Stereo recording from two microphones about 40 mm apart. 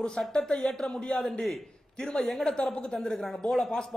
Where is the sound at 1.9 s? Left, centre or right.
Centre.